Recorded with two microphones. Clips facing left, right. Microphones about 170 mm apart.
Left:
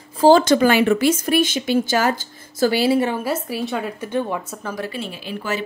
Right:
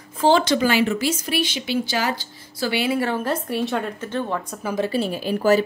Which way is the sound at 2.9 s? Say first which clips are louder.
Left 3 dB; 20° left (ahead or behind).